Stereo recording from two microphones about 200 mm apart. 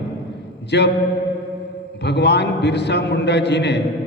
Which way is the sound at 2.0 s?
55° left (ahead or behind).